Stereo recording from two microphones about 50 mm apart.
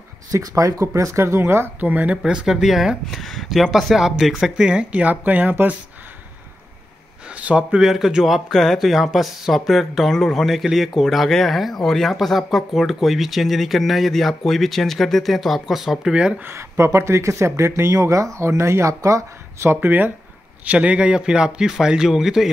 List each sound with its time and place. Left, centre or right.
0.3 s speech: right
1.4 s speech: right
1.8 s speech: right
2.2 s a man's voice: centre
4.6 s speech: centre; by 5.7 s right
7.2 s speech: right
7.8 s speech: centre
16.1 s a man's voice: centre
16.5 s speech: right
19.7 s speech: right
20.6 s a man's voice: right; by 22.5 s centre